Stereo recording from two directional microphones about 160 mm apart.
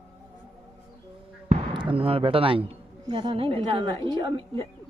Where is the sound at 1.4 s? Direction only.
35° right (ahead or behind).